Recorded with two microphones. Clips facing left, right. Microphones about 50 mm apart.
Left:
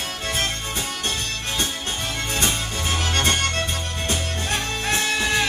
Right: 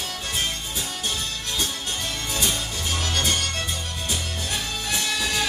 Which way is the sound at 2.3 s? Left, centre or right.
Left.